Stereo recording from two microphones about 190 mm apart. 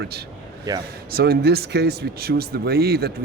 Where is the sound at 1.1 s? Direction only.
55° right (ahead or behind).